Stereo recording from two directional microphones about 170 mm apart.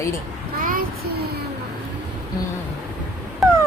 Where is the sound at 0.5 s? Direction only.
55° right (ahead or behind).